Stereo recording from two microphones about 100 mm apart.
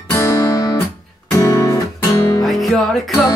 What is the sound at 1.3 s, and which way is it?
Music, 35° left (ahead or behind).